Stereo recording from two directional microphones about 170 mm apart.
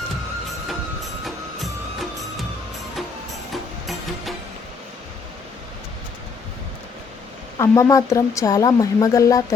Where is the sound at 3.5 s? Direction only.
Centre (ahead or behind).